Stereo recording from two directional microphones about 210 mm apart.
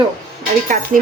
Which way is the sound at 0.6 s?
40° right (ahead or behind).